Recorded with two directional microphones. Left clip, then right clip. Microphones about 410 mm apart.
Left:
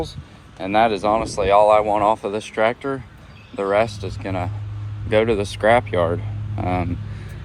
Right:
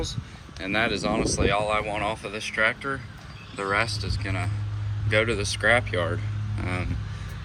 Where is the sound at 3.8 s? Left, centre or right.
Left.